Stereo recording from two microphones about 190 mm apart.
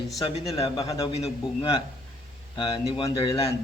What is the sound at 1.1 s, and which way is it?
A man's voice, 30° left (ahead or behind).